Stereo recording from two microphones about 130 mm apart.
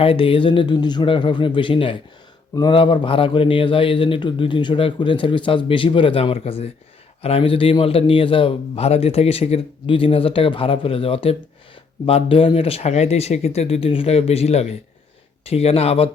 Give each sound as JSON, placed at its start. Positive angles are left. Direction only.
{"t": 0.0, "sound": "a man's voice", "side_deg": 45}